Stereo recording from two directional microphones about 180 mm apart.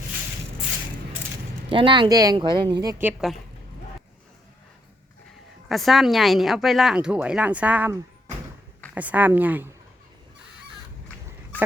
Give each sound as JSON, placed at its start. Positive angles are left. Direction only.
{"t": 1.7, "sound": "speech", "side_deg": -30}
{"t": 3.0, "sound": "speech", "side_deg": -5}
{"t": 5.6, "sound": "speech", "side_deg": 0}